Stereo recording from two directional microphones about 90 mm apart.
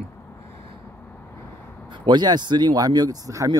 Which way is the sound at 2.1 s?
55° right (ahead or behind).